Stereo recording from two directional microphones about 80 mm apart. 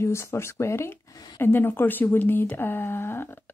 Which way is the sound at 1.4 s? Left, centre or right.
Left.